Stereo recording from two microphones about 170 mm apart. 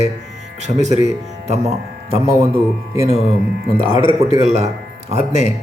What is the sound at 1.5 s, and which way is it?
A man's voice, 35° right (ahead or behind).